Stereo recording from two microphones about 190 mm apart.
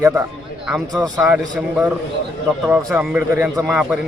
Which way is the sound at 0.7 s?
Centre (ahead or behind).